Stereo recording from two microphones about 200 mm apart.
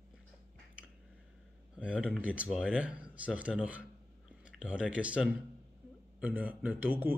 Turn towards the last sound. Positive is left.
turn(degrees=-10)  # may be behind; listen again after turning